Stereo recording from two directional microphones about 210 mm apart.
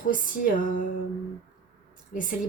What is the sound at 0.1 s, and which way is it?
Music, 40° left (ahead or behind).